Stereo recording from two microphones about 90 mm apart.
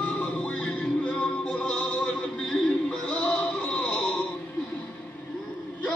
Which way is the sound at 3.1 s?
10° left (ahead or behind).